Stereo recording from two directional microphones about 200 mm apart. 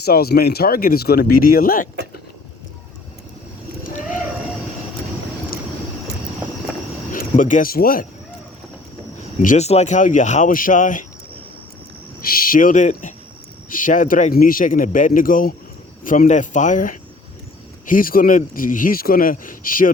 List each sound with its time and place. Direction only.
0.0 s a man's voice: 50° left (ahead or behind)
3.8 s a sound: 40° left (ahead or behind)
7.1 s speech: 40° left (ahead or behind)
9.4 s speech: 40° left (ahead or behind)
12.2 s a man's voice: 45° left (ahead or behind)